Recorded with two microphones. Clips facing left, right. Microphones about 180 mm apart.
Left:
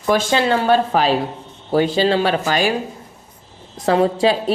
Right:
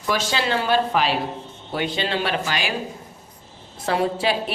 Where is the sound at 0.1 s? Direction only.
50° left (ahead or behind).